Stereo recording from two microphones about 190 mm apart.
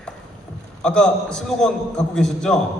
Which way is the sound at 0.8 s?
5° left (ahead or behind).